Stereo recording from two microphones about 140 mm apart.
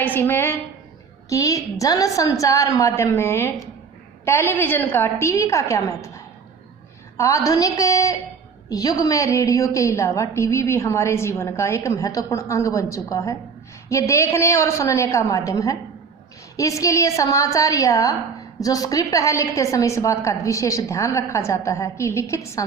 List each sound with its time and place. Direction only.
0.0 s a woman's voice: 15° left (ahead or behind)